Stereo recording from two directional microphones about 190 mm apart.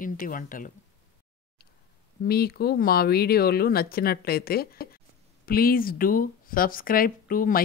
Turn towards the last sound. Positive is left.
turn(degrees=50)  # may be behind; listen again after turning